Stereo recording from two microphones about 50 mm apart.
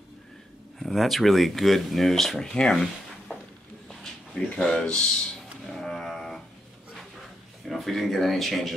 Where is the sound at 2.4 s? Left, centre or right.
Centre.